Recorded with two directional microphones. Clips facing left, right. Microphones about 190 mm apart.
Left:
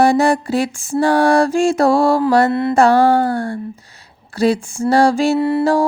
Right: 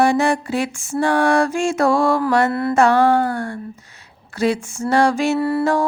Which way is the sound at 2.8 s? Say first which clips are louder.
Left 2 dB; 35° left (ahead or behind).